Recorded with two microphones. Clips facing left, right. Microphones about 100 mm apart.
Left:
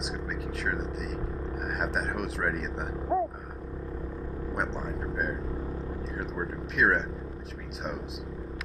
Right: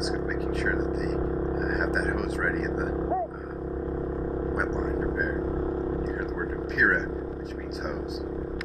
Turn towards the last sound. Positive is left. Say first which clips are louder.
# right 1 dB
turn(degrees=0)  # may be behind; listen again after turning